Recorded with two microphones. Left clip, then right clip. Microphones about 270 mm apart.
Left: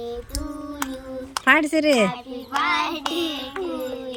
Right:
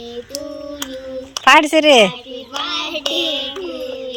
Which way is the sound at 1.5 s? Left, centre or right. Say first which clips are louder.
Right 8 dB; centre.